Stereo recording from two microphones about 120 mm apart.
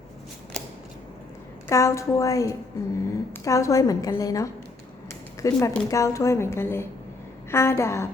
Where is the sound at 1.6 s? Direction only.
25° left (ahead or behind).